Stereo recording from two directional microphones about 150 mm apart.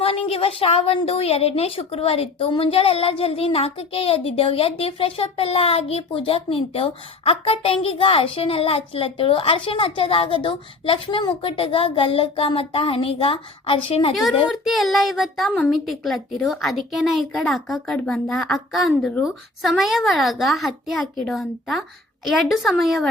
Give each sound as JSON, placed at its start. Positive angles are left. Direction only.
{"t": 0.0, "sound": "a woman's voice", "side_deg": 40}
{"t": 14.7, "sound": "a woman's voice", "side_deg": 0}